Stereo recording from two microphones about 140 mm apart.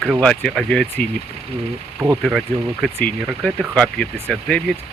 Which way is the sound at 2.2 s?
Centre (ahead or behind).